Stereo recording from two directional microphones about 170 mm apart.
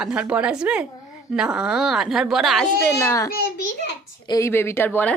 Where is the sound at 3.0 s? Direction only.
20° left (ahead or behind).